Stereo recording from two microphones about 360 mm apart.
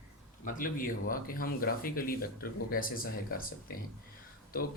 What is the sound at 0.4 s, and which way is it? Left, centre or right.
Speech, left.